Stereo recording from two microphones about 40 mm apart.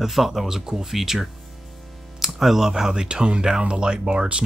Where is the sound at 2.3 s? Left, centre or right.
Centre.